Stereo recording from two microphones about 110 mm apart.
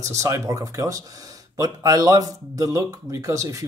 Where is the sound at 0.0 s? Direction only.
25° right (ahead or behind).